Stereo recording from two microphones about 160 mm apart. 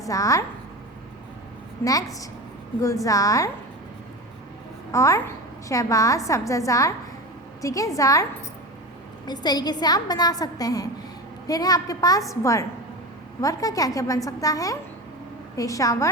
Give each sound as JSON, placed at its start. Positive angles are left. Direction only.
{"t": 0.0, "sound": "a woman's voice", "side_deg": 20}
{"t": 1.8, "sound": "a woman's voice", "side_deg": 20}
{"t": 4.9, "sound": "a woman's voice", "side_deg": 20}